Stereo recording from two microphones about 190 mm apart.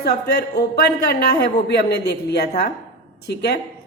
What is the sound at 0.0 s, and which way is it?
A woman's voice, 60° left (ahead or behind).